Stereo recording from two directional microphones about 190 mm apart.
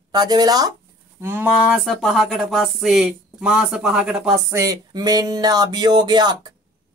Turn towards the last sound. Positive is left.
turn(degrees=-20)  # may be behind; listen again after turning